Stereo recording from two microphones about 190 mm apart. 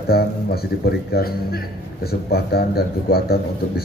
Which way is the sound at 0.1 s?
55° left (ahead or behind).